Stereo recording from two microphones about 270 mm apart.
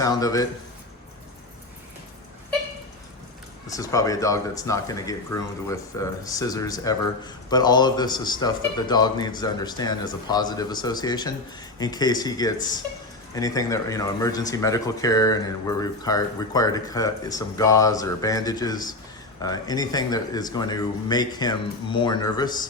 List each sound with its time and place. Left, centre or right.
0.0 s speech: centre
3.7 s speech: centre